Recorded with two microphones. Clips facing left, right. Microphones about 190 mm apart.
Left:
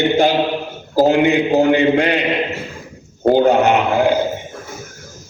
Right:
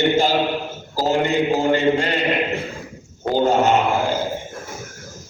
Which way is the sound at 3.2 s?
60° left (ahead or behind).